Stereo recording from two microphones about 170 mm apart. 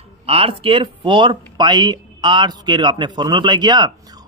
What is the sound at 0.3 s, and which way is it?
A man's voice, 35° right (ahead or behind).